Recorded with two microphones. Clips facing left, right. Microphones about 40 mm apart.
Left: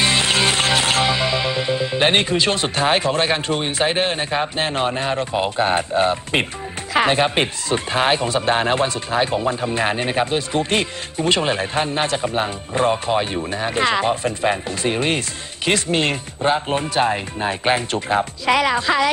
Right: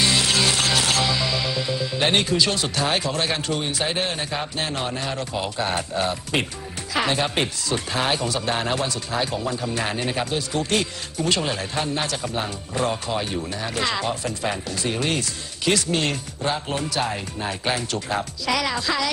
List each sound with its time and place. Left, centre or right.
0.0 s music: left
6.9 s speech: left